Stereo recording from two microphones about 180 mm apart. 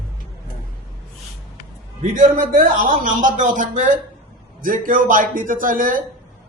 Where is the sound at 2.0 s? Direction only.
50° right (ahead or behind).